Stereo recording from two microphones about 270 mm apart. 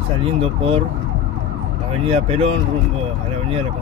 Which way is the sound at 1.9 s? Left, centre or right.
Right.